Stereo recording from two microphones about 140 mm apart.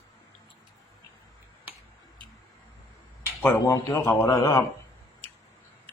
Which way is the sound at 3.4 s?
20° left (ahead or behind).